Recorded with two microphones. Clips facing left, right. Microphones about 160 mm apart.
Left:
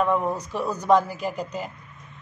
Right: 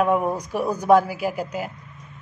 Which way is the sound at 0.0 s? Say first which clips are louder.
Right 2 dB; 10° right (ahead or behind).